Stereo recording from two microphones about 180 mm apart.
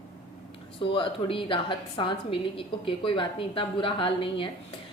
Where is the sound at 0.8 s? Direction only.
30° left (ahead or behind).